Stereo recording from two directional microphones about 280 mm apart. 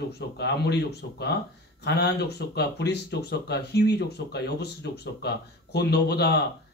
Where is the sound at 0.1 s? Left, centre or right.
Left.